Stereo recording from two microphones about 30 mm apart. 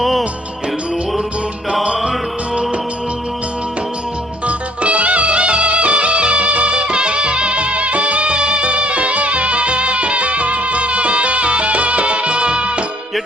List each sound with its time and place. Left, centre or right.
0.0 s music: centre
4.4 s music: right